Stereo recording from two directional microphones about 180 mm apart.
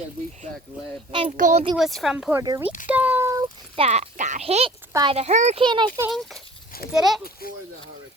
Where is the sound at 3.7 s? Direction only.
35° right (ahead or behind).